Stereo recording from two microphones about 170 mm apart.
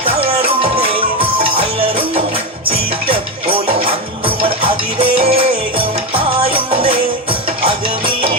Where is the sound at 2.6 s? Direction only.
30° right (ahead or behind).